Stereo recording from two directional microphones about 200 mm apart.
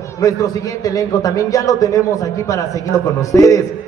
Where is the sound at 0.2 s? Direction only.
15° left (ahead or behind).